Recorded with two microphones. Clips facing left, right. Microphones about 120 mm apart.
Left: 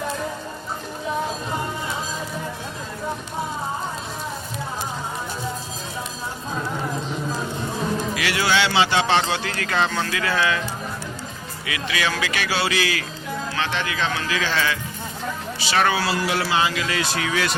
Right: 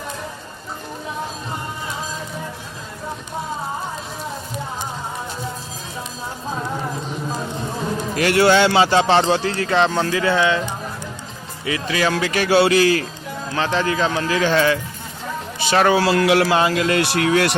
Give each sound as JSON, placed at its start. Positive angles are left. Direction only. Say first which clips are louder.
{"t": 8.1, "sound": "a man's voice", "louder": "right 10 dB", "side_deg": -50}
{"t": 11.6, "sound": "a man's voice", "louder": "right 5 dB", "side_deg": -35}
{"t": 12.5, "sound": "a man's voice", "louder": "right 11 dB", "side_deg": -55}
{"t": 15.7, "sound": "speech", "louder": "right 5 dB", "side_deg": -25}
{"t": 16.0, "sound": "speech", "louder": "right 7 dB", "side_deg": -65}